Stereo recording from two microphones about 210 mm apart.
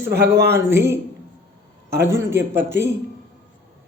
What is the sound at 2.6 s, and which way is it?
Speech, 10° right (ahead or behind).